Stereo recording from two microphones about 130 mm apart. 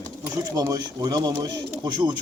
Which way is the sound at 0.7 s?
30° right (ahead or behind).